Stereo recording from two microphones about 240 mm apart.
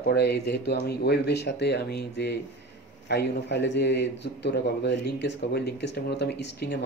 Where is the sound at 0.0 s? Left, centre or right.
Left.